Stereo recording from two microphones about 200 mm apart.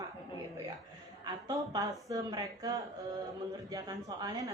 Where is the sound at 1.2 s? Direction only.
15° right (ahead or behind).